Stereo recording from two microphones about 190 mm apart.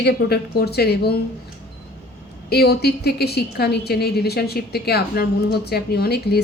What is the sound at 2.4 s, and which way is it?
A woman's voice, 55° left (ahead or behind).